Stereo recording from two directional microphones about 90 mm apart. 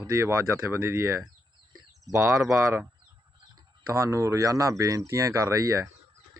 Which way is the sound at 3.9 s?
35° right (ahead or behind).